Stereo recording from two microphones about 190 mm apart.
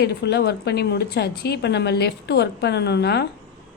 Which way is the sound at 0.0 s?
60° left (ahead or behind).